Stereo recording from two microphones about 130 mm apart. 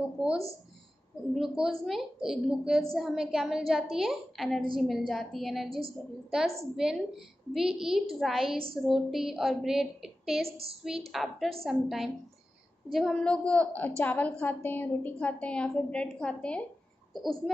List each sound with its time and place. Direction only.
1.3 s a woman's voice: centre (ahead or behind)
5.7 s a woman's voice: 45° right (ahead or behind)
6.6 s a woman's voice: 5° right (ahead or behind)